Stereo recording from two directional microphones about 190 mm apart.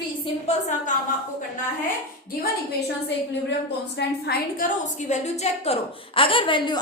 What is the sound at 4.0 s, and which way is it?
A woman's voice, 60° left (ahead or behind).